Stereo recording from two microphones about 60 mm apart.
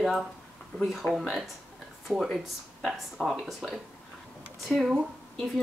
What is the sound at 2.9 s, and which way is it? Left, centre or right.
Speech, centre.